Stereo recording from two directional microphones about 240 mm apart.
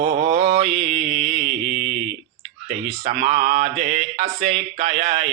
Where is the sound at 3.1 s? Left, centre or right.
Right.